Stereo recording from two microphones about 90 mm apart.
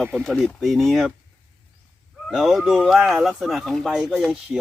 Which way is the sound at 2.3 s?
5° right (ahead or behind).